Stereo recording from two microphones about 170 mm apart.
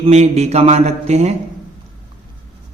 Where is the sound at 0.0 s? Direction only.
40° right (ahead or behind).